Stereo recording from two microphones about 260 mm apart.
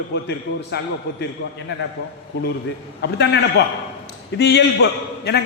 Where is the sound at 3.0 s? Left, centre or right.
Left.